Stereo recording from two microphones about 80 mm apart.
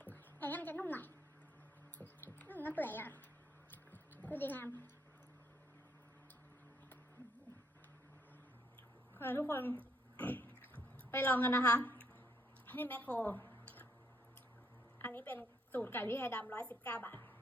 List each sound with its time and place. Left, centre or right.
0.0 s a sound: left
2.0 s mouse: left
3.9 s music: left
9.1 s a woman's voice: left
10.2 s a sound: left
11.1 s a woman's voice: left
12.6 s a sound: left
14.9 s a woman's voice: left
16.5 s a woman's voice: centre